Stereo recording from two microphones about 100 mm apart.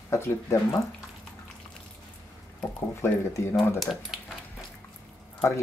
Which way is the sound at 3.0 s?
25° left (ahead or behind).